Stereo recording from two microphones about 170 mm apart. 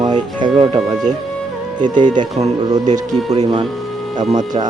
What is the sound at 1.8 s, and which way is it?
Speech, 25° right (ahead or behind).